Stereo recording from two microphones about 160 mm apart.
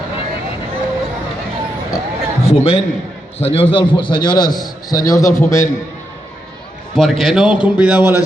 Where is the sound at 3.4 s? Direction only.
35° left (ahead or behind); by 5.6 s 20° left (ahead or behind).